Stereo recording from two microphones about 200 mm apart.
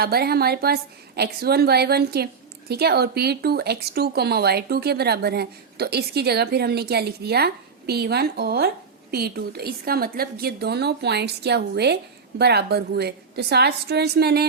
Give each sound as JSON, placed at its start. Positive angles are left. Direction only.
{"t": 0.0, "sound": "a woman's voice", "side_deg": -50}